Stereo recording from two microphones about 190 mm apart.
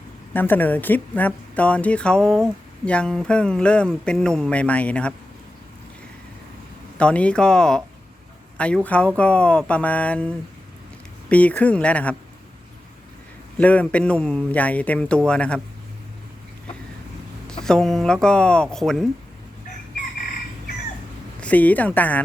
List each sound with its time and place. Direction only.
0.3 s a woman's voice: 10° left (ahead or behind)
7.0 s a woman's voice: 5° left (ahead or behind)
13.6 s a woman's voice: 5° left (ahead or behind)
17.5 s a woman's voice: 5° left (ahead or behind)
21.4 s speech: 10° left (ahead or behind)